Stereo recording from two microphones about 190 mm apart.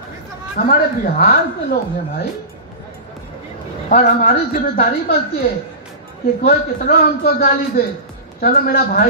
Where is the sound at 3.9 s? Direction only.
45° left (ahead or behind).